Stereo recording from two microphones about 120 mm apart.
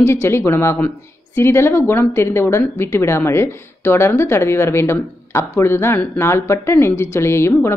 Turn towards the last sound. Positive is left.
turn(degrees=20)  # may be behind; listen again after turning